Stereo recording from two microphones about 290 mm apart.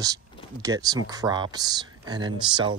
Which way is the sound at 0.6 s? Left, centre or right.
Centre.